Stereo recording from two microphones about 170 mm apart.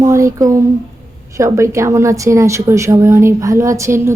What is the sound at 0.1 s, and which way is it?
A woman's voice, 20° right (ahead or behind).